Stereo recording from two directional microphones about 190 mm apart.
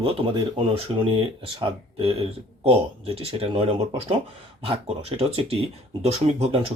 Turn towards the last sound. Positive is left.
turn(degrees=-30)  # may be behind; listen again after turning